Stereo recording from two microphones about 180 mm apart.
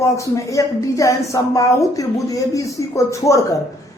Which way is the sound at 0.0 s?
15° left (ahead or behind).